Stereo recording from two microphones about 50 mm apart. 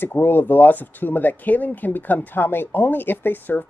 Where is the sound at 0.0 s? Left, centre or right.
Left.